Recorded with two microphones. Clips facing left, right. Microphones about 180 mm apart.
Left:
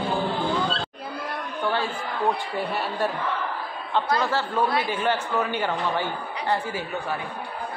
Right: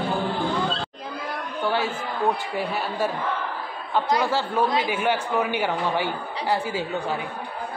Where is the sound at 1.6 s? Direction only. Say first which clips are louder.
Right 2 dB; 5° right (ahead or behind).